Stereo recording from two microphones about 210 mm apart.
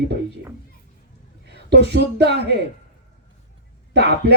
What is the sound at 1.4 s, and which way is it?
Speech, 55° right (ahead or behind).